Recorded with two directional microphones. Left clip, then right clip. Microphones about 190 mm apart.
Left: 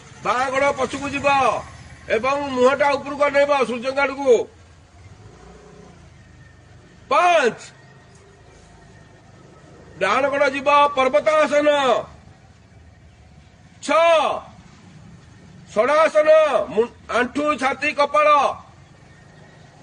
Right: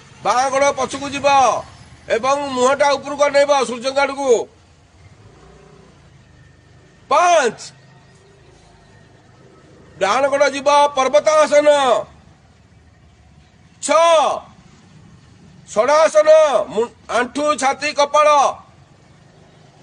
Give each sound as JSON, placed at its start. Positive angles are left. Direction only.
{"t": 0.2, "sound": "a man's voice", "side_deg": -25}
{"t": 7.1, "sound": "a man's voice", "side_deg": -25}
{"t": 10.0, "sound": "a man's voice", "side_deg": -25}
{"t": 13.8, "sound": "a man's voice", "side_deg": -25}
{"t": 15.7, "sound": "a man's voice", "side_deg": -25}